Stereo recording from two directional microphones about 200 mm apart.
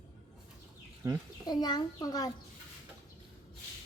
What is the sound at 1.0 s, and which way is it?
Speech, 15° right (ahead or behind).